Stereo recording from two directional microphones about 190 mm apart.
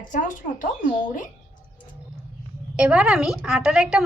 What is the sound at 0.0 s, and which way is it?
Speech, 40° left (ahead or behind).